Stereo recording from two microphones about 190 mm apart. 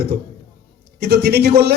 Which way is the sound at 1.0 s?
60° right (ahead or behind).